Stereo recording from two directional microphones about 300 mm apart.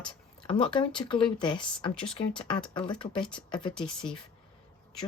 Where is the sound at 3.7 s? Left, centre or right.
Centre.